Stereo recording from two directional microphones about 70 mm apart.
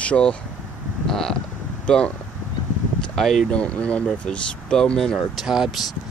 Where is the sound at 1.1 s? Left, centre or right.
Centre.